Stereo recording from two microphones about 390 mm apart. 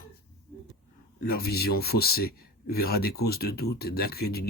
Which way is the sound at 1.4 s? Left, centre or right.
Left.